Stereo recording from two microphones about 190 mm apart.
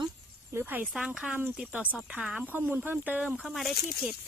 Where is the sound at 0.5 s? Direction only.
10° right (ahead or behind).